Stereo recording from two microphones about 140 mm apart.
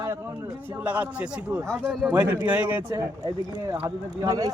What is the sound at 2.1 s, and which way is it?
Speech, 30° right (ahead or behind).